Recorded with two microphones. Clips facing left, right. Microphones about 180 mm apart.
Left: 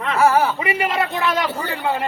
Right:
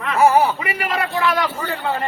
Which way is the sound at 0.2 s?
20° right (ahead or behind).